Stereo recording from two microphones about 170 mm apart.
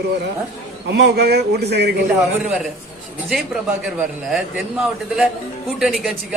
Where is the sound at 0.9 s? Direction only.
75° right (ahead or behind).